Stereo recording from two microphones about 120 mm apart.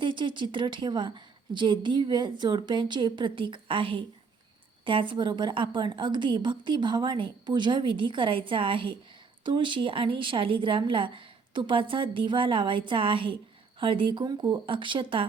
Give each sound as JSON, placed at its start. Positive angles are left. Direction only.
{"t": 0.0, "sound": "a woman's voice", "side_deg": -40}